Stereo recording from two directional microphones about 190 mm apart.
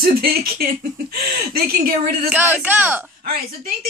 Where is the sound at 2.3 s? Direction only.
10° right (ahead or behind).